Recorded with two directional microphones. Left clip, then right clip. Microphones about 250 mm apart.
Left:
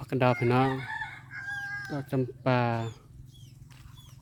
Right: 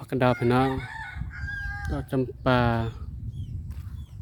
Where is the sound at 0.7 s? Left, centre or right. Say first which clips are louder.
Even; right.